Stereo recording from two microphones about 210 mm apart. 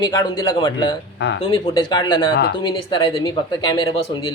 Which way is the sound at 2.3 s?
50° left (ahead or behind).